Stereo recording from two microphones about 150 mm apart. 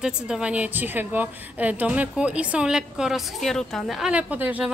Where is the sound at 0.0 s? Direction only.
5° right (ahead or behind).